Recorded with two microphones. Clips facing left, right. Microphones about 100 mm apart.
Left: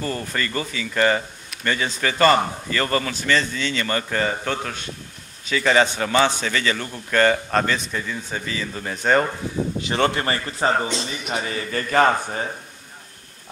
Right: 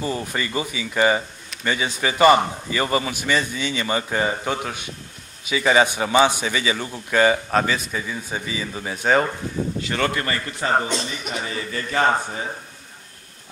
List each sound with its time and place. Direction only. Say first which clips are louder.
0.0 s speech: right 1 dB; 15° right (ahead or behind)
9.6 s a man's voice: left 3 dB; 20° left (ahead or behind)
11.2 s a man's voice: left 2 dB; 50° left (ahead or behind)